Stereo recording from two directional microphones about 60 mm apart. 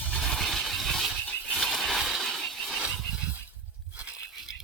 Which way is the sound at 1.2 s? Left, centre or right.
Left.